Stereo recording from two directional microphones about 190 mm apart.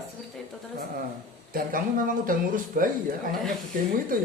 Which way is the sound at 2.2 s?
50° right (ahead or behind).